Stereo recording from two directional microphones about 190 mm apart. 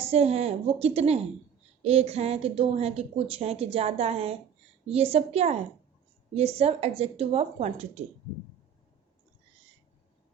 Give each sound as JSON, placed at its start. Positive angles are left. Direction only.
{"t": 0.1, "sound": "a woman's voice", "side_deg": -35}